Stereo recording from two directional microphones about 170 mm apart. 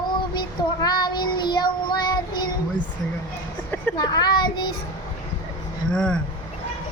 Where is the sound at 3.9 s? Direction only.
25° left (ahead or behind).